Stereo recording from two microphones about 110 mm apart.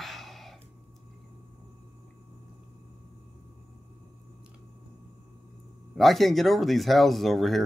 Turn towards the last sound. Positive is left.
turn(degrees=0)  # may be behind; listen again after turning